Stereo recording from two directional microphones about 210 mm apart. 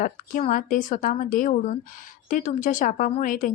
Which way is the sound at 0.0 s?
40° left (ahead or behind).